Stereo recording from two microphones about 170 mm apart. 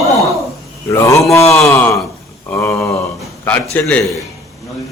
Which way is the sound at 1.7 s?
10° left (ahead or behind).